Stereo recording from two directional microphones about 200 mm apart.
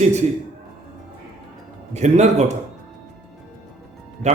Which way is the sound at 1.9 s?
35° right (ahead or behind).